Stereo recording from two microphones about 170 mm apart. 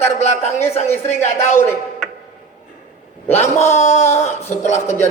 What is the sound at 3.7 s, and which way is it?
Speech, 40° left (ahead or behind).